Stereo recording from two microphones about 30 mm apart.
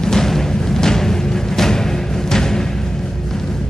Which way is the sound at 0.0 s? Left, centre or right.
Centre.